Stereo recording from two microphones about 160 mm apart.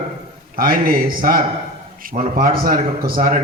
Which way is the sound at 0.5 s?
65° right (ahead or behind).